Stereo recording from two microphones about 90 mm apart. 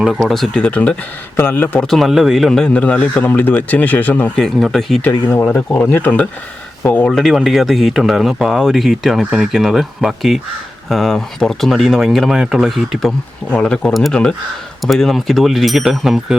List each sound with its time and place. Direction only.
0.0 s speech: 5° right (ahead or behind); by 0.9 s 15° left (ahead or behind)
1.4 s a man's voice: 25° left (ahead or behind)
1.8 s a man's voice: centre (ahead or behind); by 4.3 s 20° left (ahead or behind)
4.4 s speech: centre (ahead or behind)
5.9 s a man's voice: 20° left (ahead or behind)
7.1 s speech: centre (ahead or behind)
13.5 s a man's voice: 10° left (ahead or behind)